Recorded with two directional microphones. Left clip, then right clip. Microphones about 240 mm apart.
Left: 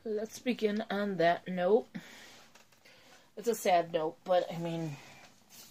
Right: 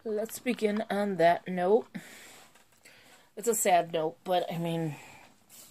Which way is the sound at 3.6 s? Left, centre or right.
Right.